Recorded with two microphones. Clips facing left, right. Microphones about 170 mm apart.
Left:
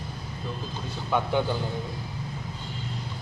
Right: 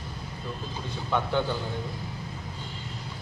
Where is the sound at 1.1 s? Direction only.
10° left (ahead or behind).